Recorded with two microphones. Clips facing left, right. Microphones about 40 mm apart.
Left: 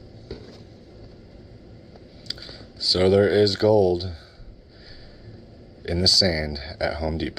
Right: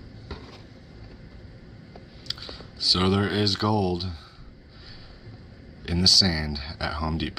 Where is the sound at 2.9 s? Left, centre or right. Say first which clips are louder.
Left 8 dB; right.